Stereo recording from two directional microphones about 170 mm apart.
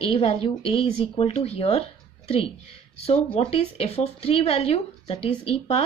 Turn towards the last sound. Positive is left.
turn(degrees=35)  # may be behind; listen again after turning